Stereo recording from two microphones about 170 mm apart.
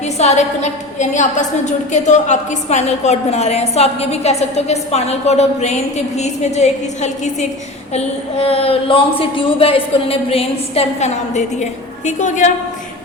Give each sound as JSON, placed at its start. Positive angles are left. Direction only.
{"t": 0.0, "sound": "a woman's voice", "side_deg": 40}